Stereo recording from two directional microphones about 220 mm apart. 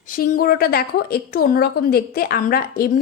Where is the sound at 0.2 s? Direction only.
40° left (ahead or behind).